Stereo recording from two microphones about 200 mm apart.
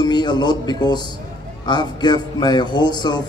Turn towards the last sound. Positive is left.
turn(degrees=20)  # may be behind; listen again after turning